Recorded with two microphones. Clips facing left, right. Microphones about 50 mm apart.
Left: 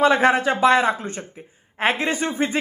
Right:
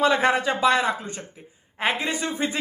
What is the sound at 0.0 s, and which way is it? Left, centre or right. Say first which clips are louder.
Speech: left 3 dB; left.